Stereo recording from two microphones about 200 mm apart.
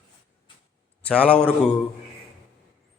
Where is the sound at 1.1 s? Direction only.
5° left (ahead or behind).